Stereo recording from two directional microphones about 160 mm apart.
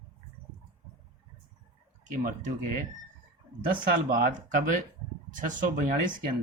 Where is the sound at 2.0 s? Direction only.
55° right (ahead or behind).